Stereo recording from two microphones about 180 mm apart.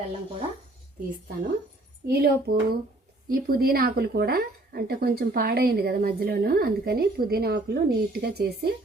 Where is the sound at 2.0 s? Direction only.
55° right (ahead or behind).